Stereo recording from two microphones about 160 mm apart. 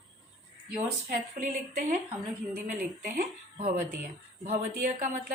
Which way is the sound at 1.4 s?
50° right (ahead or behind).